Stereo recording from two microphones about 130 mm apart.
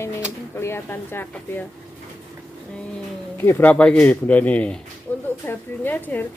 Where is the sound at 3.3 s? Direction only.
15° left (ahead or behind).